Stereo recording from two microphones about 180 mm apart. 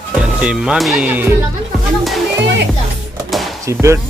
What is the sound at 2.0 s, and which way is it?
Music, centre (ahead or behind).